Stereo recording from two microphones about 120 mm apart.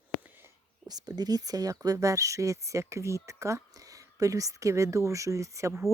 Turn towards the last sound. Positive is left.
turn(degrees=-25)  # may be behind; listen again after turning